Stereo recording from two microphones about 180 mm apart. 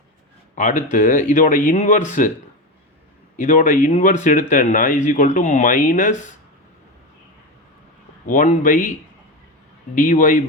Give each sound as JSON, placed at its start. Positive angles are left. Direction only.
{"t": 0.5, "sound": "speech", "side_deg": 45}
{"t": 3.3, "sound": "speech", "side_deg": 45}
{"t": 8.3, "sound": "speech", "side_deg": 45}
{"t": 9.9, "sound": "speech", "side_deg": 45}